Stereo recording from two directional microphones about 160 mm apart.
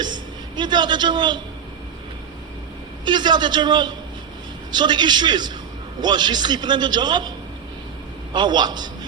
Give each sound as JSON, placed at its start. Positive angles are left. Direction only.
{"t": 0.0, "sound": "a woman's voice", "side_deg": -30}
{"t": 3.0, "sound": "a man's voice", "side_deg": -30}